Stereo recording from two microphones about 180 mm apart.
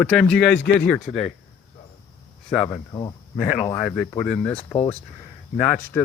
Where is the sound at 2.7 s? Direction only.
20° left (ahead or behind).